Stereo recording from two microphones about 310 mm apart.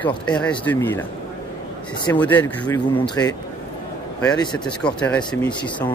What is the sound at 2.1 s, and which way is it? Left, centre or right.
Speech, centre.